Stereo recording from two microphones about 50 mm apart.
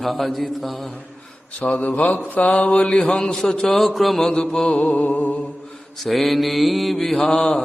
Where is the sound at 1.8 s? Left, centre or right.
Left.